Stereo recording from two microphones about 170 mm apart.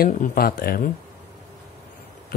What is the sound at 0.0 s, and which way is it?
Speech, 60° left (ahead or behind).